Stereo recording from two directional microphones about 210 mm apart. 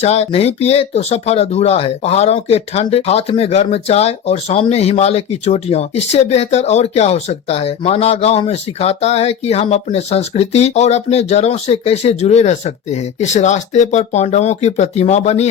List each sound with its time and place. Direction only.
0.0 s speech: 30° left (ahead or behind)